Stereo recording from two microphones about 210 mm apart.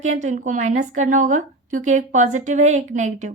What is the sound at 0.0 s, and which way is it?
A woman's voice, 35° right (ahead or behind).